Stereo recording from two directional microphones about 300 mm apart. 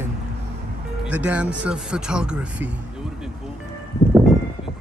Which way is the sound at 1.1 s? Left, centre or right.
Centre.